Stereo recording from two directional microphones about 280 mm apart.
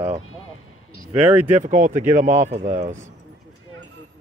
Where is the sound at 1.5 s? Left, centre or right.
Right.